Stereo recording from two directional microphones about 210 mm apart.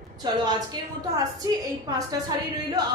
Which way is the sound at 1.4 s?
15° right (ahead or behind).